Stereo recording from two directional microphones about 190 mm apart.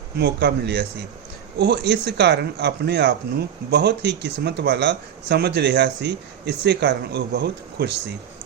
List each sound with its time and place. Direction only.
0.2 s speech: 60° right (ahead or behind)